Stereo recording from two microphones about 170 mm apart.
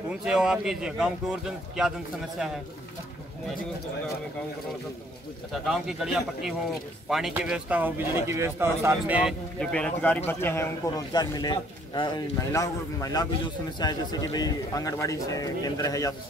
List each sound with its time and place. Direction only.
0.1 s speech: 5° right (ahead or behind)
5.5 s speech: centre (ahead or behind)
9.6 s a man's voice: 5° left (ahead or behind)